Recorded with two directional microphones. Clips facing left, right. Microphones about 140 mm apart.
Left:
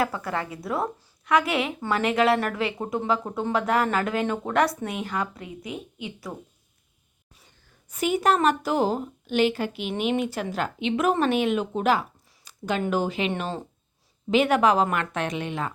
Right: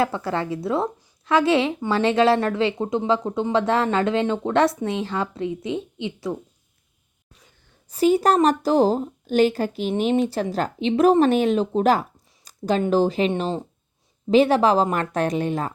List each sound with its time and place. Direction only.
0.0 s speech: 30° right (ahead or behind)
7.9 s a woman's voice: 35° right (ahead or behind)
12.5 s a sound: 35° right (ahead or behind)
12.8 s a woman's voice: 35° right (ahead or behind)
13.3 s speech: 20° right (ahead or behind)
14.3 s a woman's voice: 35° right (ahead or behind)